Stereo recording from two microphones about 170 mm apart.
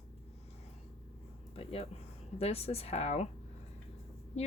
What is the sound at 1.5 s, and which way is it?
Speech, 35° left (ahead or behind).